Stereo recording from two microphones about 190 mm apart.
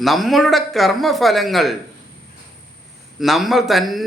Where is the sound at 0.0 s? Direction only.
Centre (ahead or behind).